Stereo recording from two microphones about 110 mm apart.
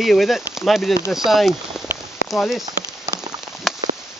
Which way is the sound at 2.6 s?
35° right (ahead or behind).